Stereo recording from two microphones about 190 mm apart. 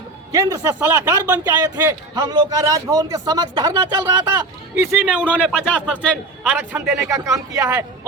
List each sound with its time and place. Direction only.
0.3 s a man's voice: 15° right (ahead or behind)
4.7 s a man's voice: 10° right (ahead or behind)
6.6 s a man's voice: 15° right (ahead or behind)